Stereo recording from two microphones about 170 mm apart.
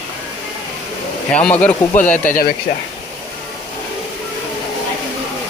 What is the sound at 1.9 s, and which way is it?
Speech, 50° left (ahead or behind).